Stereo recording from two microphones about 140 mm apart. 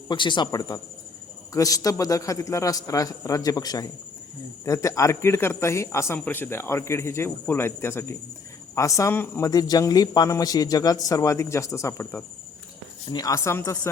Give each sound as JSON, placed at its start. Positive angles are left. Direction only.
{"t": 0.1, "sound": "a man's voice", "side_deg": 35}
{"t": 9.5, "sound": "a man's voice", "side_deg": 25}